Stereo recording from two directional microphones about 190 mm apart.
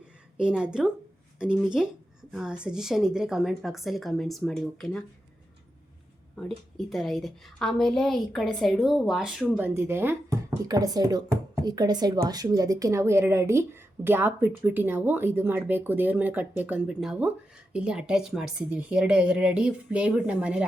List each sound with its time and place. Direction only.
0.3 s a woman's voice: 5° right (ahead or behind)
6.3 s a woman's voice: centre (ahead or behind)